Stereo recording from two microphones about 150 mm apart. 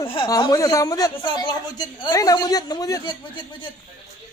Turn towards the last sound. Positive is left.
turn(degrees=30)  # may be behind; listen again after turning